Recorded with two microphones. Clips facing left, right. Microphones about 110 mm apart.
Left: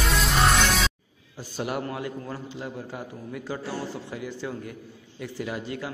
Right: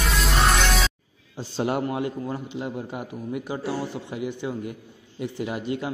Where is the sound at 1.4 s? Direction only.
25° right (ahead or behind).